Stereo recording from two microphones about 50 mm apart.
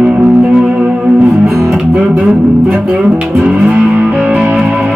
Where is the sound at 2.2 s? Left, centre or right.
Centre; by 4.4 s right.